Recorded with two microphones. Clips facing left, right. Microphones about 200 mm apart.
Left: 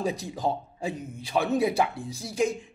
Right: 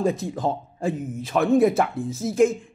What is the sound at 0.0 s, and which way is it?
Speech, centre (ahead or behind).